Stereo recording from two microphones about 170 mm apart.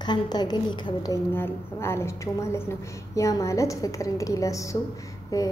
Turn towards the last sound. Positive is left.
turn(degrees=20)  # may be behind; listen again after turning